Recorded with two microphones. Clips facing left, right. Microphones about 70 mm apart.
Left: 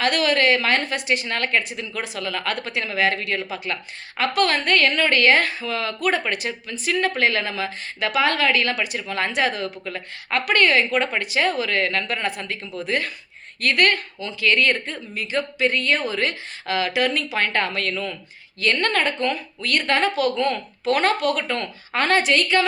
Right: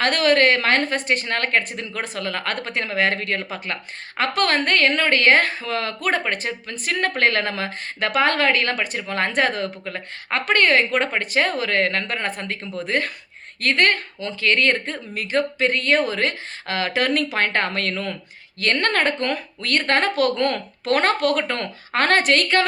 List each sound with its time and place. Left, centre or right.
0.0 s speech: right
13.6 s a woman's voice: right